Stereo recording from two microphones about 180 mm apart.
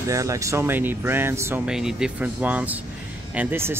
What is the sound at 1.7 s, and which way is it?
Speech, 5° right (ahead or behind).